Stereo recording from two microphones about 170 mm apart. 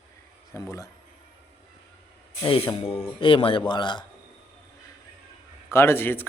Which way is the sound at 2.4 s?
30° left (ahead or behind).